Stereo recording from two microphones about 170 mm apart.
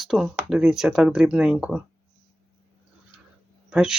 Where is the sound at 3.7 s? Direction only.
5° right (ahead or behind).